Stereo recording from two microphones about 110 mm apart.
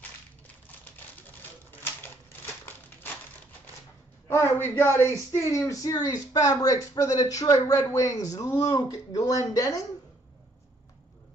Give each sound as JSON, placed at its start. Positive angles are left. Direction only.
{"t": 0.7, "sound": "typewriter", "side_deg": 15}
{"t": 4.3, "sound": "speech", "side_deg": 20}